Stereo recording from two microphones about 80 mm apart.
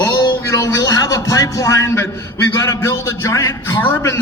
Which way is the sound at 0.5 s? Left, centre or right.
Left.